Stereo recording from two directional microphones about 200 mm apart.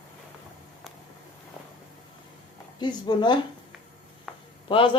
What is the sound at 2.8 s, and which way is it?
Speech, 20° left (ahead or behind).